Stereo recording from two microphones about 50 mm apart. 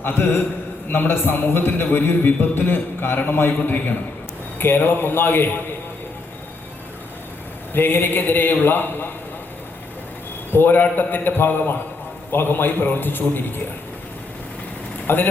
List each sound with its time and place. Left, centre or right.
0.0 s a man's voice: left
7.7 s a man's voice: left
10.5 s a man's voice: left
15.0 s speech: left